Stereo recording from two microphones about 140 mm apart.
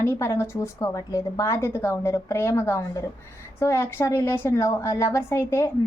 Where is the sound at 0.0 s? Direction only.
15° left (ahead or behind).